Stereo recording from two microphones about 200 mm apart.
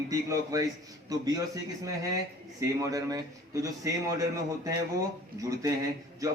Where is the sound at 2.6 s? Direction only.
15° right (ahead or behind).